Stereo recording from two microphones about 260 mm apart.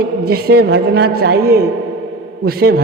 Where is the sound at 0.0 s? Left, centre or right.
Right.